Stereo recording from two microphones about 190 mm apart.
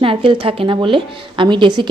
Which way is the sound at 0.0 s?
30° right (ahead or behind).